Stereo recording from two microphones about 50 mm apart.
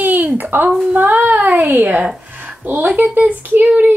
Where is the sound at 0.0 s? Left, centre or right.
Right.